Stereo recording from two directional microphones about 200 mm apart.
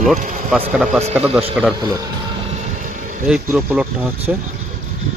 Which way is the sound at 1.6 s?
5° right (ahead or behind).